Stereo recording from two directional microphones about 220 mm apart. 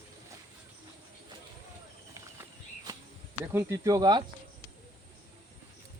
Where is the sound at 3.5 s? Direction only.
15° right (ahead or behind).